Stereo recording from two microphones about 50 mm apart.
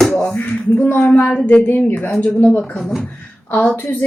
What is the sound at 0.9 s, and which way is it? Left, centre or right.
Speech, left.